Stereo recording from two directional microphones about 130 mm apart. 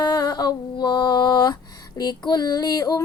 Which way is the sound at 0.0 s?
30° left (ahead or behind).